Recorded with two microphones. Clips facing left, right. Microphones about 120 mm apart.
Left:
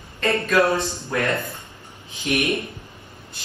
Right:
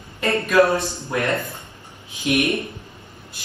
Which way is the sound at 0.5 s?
25° right (ahead or behind).